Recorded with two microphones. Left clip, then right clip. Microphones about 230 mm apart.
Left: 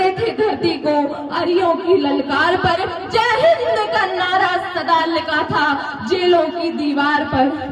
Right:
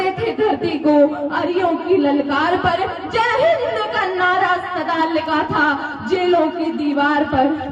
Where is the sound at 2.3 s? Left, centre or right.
Left.